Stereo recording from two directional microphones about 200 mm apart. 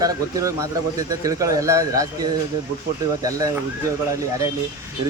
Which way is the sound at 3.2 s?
15° right (ahead or behind).